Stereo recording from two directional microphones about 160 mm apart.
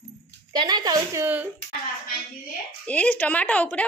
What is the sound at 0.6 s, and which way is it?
Speech, 25° right (ahead or behind).